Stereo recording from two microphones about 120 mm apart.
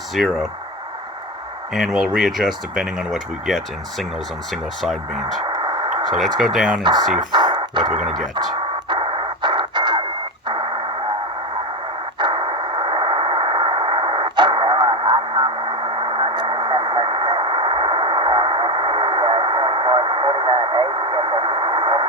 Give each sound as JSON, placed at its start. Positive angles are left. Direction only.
{"t": 0.1, "sound": "speech", "side_deg": 0}
{"t": 1.7, "sound": "speech", "side_deg": 0}
{"t": 5.5, "sound": "a sound", "side_deg": -40}
{"t": 6.1, "sound": "speech", "side_deg": 0}
{"t": 7.3, "sound": "dog", "side_deg": -40}
{"t": 8.9, "sound": "radio", "side_deg": -45}
{"t": 12.2, "sound": "a sound", "side_deg": -45}